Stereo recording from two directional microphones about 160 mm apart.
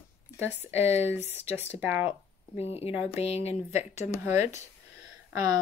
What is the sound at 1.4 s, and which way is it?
Speech, 40° left (ahead or behind).